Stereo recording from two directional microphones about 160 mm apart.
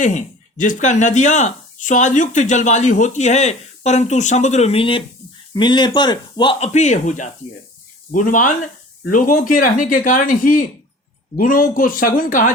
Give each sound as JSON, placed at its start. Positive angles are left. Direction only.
{"t": 0.0, "sound": "speech", "side_deg": 50}
{"t": 6.6, "sound": "speech", "side_deg": 45}